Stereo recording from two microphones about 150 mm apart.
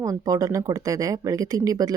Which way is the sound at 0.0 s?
20° right (ahead or behind).